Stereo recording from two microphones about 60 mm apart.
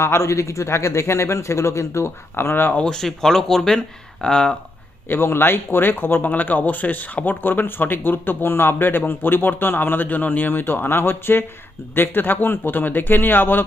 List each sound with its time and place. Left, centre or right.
0.0 s speech: left
2.7 s speech: centre
5.0 s speech: left